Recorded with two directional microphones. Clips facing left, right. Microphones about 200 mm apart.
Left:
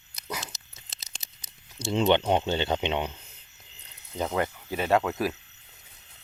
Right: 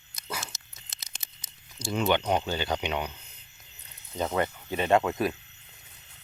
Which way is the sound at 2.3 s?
25° left (ahead or behind).